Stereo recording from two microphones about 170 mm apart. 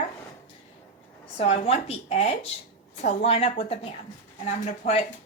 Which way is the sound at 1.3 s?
35° left (ahead or behind).